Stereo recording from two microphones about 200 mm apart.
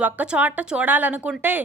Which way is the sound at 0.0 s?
5° right (ahead or behind).